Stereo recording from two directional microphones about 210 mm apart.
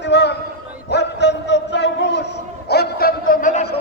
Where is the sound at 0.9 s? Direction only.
55° left (ahead or behind).